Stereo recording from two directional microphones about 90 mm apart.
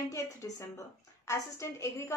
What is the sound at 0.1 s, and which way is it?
A woman's voice, 35° left (ahead or behind).